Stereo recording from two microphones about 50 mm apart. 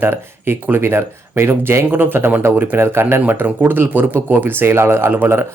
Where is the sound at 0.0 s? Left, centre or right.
Right.